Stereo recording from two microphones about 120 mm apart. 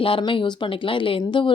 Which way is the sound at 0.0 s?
45° left (ahead or behind).